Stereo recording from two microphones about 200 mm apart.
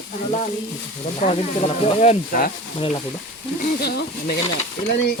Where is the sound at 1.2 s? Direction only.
35° left (ahead or behind).